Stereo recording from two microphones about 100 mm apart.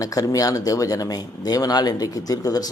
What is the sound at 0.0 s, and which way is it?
Speech, 35° left (ahead or behind).